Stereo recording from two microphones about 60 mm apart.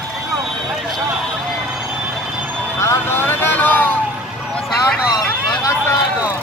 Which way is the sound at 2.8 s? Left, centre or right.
Left.